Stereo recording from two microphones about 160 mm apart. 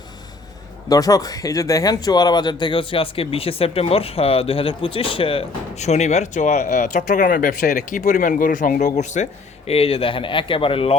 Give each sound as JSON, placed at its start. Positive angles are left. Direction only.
{"t": 0.9, "sound": "speech", "side_deg": 20}